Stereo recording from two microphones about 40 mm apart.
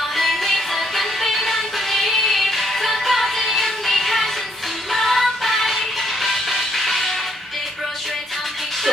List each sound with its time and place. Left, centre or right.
0.2 s music: centre